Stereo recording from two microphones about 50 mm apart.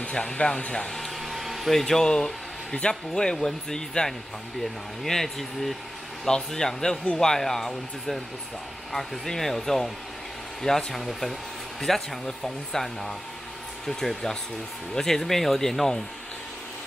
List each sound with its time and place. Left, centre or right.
0.0 s speech: centre
0.9 s speech: centre